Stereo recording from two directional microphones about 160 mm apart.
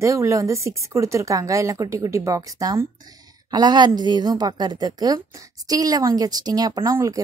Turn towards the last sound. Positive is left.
turn(degrees=-20)  # may be behind; listen again after turning